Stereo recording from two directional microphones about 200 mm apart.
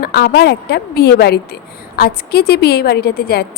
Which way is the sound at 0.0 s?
50° left (ahead or behind).